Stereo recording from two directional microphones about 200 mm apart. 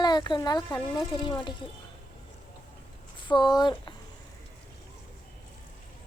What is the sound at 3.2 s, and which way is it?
Speech, 25° left (ahead or behind).